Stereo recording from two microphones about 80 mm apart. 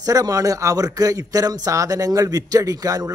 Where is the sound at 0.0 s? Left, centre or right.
Right.